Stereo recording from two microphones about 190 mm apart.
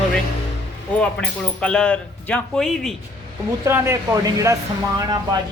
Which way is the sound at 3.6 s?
15° right (ahead or behind).